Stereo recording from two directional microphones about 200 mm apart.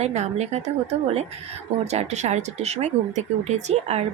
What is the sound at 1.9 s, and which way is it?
Speech, 35° right (ahead or behind).